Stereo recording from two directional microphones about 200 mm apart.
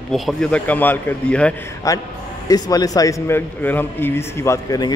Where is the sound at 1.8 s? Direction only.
15° left (ahead or behind).